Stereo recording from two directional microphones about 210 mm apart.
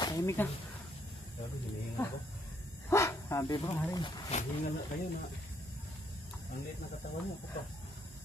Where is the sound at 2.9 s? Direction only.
15° left (ahead or behind).